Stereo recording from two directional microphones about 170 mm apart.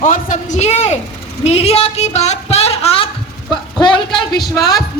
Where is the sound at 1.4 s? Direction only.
35° left (ahead or behind).